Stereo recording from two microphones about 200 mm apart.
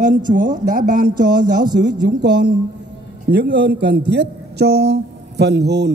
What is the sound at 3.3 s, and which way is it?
A man's voice, 60° right (ahead or behind).